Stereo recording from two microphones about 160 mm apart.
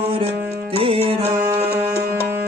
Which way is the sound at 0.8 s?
35° right (ahead or behind).